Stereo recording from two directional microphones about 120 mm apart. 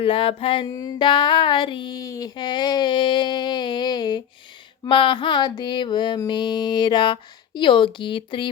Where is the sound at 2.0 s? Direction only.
30° left (ahead or behind).